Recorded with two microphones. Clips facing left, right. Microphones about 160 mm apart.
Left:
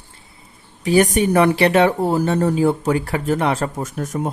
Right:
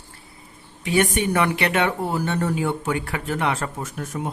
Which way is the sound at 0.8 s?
40° left (ahead or behind).